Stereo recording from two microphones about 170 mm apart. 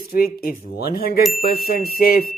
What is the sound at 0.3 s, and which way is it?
Speech, 65° left (ahead or behind).